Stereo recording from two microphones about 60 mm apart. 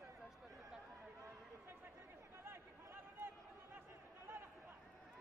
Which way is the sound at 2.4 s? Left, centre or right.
Right.